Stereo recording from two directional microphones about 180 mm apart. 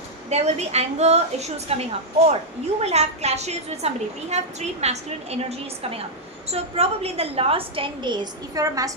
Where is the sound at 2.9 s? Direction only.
35° right (ahead or behind).